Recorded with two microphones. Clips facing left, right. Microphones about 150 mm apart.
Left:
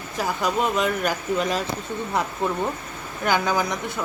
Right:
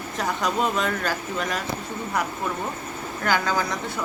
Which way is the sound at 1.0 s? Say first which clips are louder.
Left 4 dB; 20° left (ahead or behind).